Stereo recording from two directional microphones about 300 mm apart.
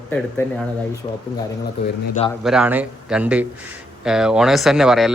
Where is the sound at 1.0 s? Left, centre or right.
Centre.